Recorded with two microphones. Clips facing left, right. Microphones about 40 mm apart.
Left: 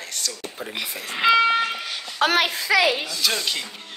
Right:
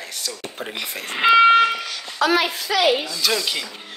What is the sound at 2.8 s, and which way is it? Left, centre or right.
Speech, right.